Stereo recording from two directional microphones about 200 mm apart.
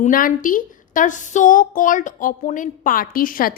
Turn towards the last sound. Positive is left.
turn(degrees=45)  # may be behind; listen again after turning